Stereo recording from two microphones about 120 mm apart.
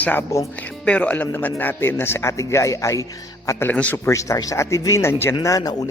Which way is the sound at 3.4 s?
15° left (ahead or behind).